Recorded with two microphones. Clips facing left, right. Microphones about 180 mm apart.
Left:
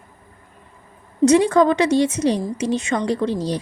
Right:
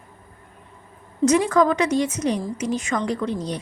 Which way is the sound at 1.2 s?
30° left (ahead or behind).